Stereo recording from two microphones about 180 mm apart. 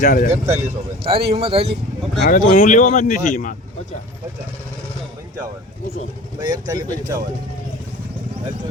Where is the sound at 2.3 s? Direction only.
50° left (ahead or behind).